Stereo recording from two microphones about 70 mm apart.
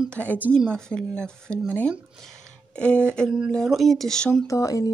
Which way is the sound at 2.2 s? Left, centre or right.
Centre.